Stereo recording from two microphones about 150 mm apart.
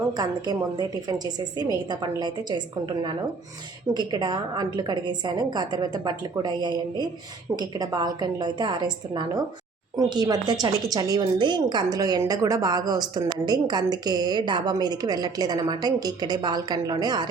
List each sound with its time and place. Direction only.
0.1 s a woman's voice: 25° right (ahead or behind)